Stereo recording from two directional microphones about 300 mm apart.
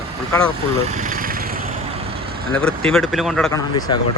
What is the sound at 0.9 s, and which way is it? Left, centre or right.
Lawn mower, right.